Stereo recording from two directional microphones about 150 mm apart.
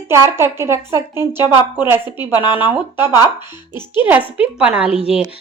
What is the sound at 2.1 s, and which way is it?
Speech, 30° left (ahead or behind).